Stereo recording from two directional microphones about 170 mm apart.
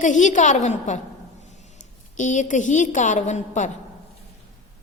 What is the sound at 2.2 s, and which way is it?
A woman's voice, 45° left (ahead or behind).